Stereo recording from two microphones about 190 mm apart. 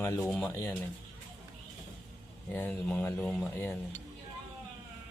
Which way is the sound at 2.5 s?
10° left (ahead or behind).